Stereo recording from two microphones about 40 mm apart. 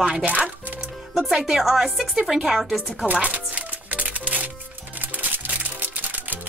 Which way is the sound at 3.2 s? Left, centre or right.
Right.